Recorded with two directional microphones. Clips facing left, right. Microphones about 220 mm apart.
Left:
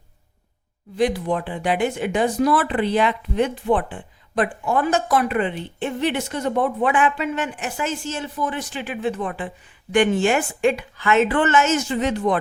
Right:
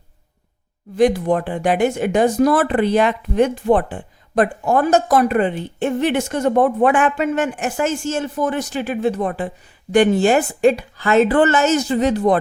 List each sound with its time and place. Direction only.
0.9 s speech: 45° right (ahead or behind)